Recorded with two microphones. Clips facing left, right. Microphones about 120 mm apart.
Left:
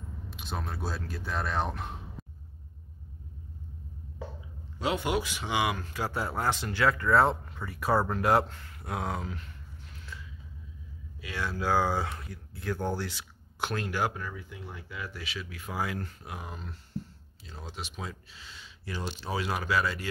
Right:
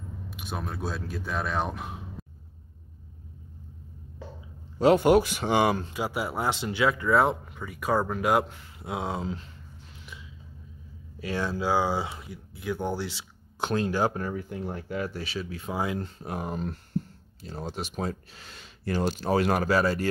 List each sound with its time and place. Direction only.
0.3 s speech: 5° right (ahead or behind)
4.7 s speech: 45° right (ahead or behind)
5.9 s speech: 15° right (ahead or behind)
7.6 s speech: centre (ahead or behind)
8.8 s speech: 20° right (ahead or behind)
11.1 s speech: 35° right (ahead or behind)
11.5 s speech: 20° right (ahead or behind)
14.2 s speech: 50° right (ahead or behind); by 16.3 s 25° right (ahead or behind)
16.3 s speech: 45° right (ahead or behind)